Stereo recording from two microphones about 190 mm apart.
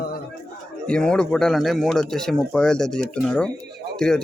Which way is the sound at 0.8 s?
5° left (ahead or behind).